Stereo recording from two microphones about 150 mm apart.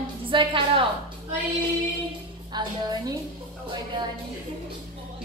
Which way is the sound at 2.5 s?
30° right (ahead or behind).